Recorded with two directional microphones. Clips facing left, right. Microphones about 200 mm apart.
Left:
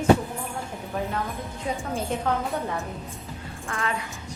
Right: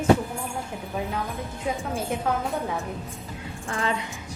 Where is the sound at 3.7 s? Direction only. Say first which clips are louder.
Right 3 dB; 30° right (ahead or behind).